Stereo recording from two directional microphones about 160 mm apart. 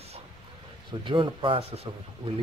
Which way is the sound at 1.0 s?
30° right (ahead or behind).